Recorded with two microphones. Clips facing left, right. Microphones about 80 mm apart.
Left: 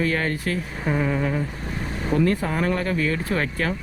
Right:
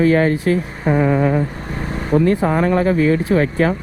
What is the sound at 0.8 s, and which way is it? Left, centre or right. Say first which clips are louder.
Speech: right 7 dB; right.